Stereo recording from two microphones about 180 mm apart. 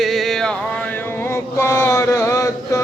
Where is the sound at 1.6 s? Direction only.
15° left (ahead or behind).